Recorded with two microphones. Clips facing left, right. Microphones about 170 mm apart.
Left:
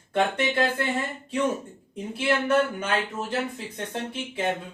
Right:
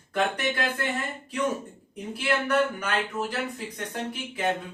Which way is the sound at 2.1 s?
25° left (ahead or behind).